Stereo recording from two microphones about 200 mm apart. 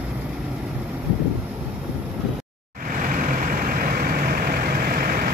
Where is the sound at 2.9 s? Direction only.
40° right (ahead or behind).